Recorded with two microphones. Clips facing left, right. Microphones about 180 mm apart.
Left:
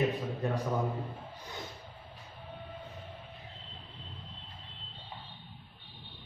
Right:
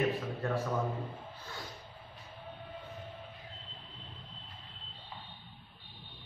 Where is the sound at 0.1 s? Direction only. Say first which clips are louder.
Left 1 dB; 15° left (ahead or behind).